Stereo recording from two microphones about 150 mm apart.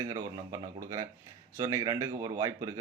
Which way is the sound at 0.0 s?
20° right (ahead or behind).